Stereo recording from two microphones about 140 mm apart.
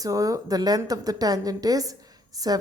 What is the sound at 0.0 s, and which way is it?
A woman's voice, 25° right (ahead or behind).